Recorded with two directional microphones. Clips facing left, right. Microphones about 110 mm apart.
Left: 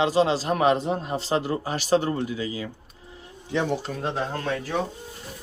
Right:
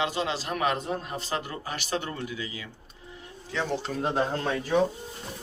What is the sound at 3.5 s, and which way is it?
Speech, 15° left (ahead or behind).